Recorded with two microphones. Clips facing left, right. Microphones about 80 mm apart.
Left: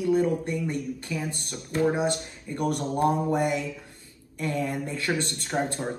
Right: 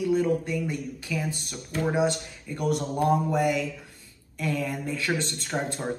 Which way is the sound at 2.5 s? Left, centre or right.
Left.